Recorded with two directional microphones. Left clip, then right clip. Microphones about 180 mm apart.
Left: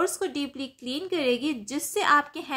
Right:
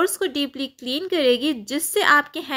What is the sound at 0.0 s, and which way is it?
A woman's voice, 30° right (ahead or behind).